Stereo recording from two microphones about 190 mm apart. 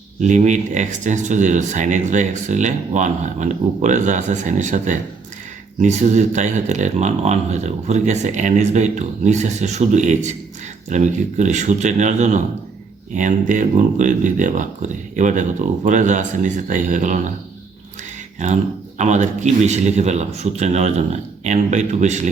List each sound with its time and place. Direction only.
0.2 s speech: 40° right (ahead or behind)
18.3 s speech: 40° right (ahead or behind)